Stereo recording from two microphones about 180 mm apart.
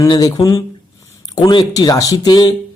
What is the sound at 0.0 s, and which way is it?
Speech, 20° left (ahead or behind).